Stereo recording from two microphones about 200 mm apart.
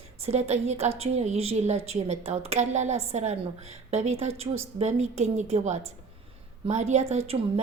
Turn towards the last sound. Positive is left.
turn(degrees=-30)  # may be behind; listen again after turning